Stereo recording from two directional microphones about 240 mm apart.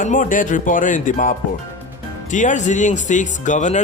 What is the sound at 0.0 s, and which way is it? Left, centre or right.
Speech, left.